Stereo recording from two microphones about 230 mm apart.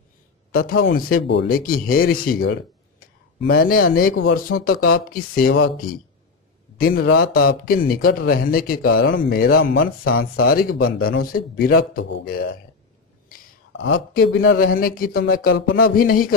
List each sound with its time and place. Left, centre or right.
0.5 s speech: left
4.1 s speech: left
4.5 s speech: left
13.7 s speech: left
14.1 s speech: left